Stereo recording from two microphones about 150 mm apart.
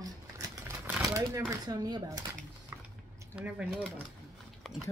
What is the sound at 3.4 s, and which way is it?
Speech, 5° right (ahead or behind).